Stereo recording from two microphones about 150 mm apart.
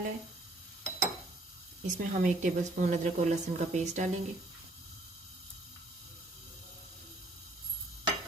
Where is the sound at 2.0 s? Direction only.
60° right (ahead or behind).